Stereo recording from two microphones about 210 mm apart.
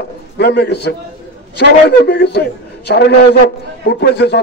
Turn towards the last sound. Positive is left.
turn(degrees=50)  # may be behind; listen again after turning